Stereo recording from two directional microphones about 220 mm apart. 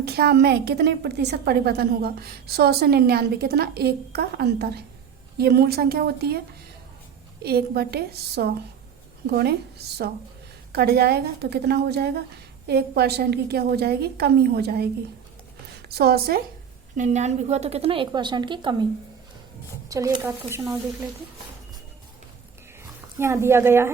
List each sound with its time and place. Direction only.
0.0 s a woman's voice: 45° right (ahead or behind)
7.4 s a woman's voice: 45° right (ahead or behind)
16.0 s a woman's voice: 45° right (ahead or behind)
17.0 s a woman's voice: 30° right (ahead or behind)
19.9 s a woman's voice: 15° right (ahead or behind)
23.1 s a woman's voice: 10° right (ahead or behind)